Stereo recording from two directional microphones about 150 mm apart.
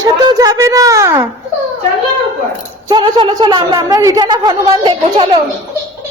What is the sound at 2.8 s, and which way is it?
A child's voice, 30° right (ahead or behind).